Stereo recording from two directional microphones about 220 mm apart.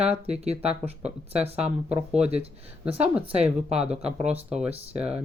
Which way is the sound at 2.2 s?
30° right (ahead or behind).